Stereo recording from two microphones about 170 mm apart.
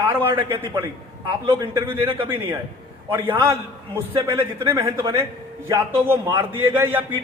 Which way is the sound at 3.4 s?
15° right (ahead or behind).